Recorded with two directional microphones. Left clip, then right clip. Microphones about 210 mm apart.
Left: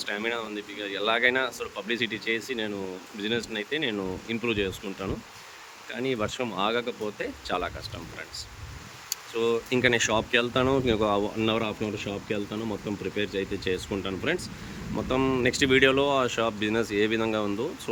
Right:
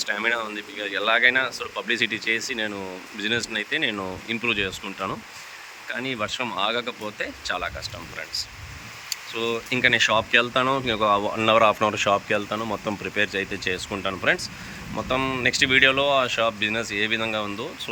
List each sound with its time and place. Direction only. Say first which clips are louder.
0.0 s speech: right 6 dB; 10° left (ahead or behind)
9.3 s speech: left 1 dB; 15° left (ahead or behind)